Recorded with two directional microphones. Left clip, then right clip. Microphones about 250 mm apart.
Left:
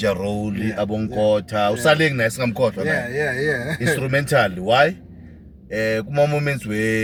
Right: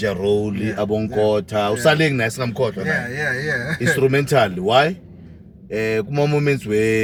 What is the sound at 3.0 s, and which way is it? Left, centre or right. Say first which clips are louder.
Speech: left 1 dB; centre.